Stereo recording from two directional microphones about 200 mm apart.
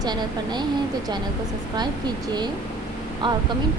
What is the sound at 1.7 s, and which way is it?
Speech, 20° right (ahead or behind).